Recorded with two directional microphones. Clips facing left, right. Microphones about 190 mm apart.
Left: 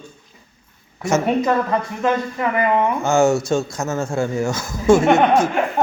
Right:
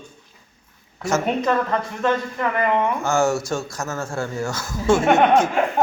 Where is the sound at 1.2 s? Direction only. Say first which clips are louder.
Left 3 dB; 10° left (ahead or behind).